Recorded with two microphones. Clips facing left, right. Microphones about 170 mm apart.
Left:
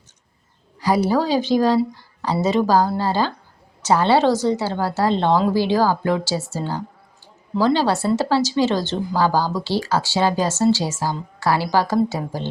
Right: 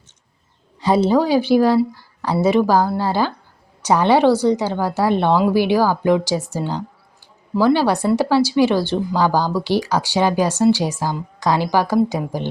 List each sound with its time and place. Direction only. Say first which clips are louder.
0.8 s a woman's voice: right 3 dB; 25° right (ahead or behind)